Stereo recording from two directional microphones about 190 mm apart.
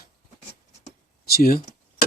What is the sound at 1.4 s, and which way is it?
Speech, 50° left (ahead or behind).